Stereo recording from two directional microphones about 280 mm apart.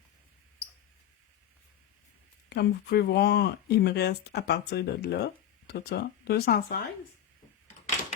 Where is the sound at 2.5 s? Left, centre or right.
Left.